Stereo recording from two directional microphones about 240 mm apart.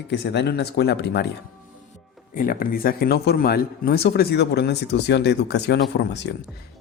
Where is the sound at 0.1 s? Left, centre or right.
Left.